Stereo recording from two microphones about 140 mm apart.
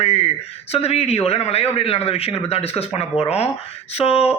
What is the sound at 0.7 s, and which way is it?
A man's voice, 45° left (ahead or behind).